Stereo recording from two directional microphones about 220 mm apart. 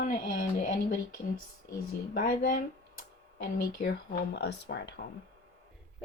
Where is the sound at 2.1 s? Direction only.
40° left (ahead or behind).